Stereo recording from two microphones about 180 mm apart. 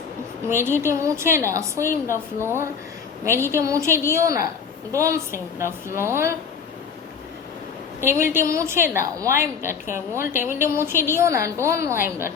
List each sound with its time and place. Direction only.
0.4 s a woman's voice: 15° right (ahead or behind)
1.8 s a woman's voice: 15° left (ahead or behind)
2.1 s a woman's voice: 15° right (ahead or behind)
8.3 s a woman's voice: 15° right (ahead or behind)